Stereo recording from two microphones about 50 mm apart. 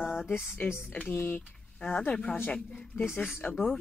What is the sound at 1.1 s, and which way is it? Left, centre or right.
Speech, left.